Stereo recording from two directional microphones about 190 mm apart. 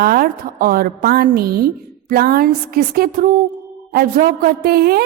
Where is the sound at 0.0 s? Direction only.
50° right (ahead or behind).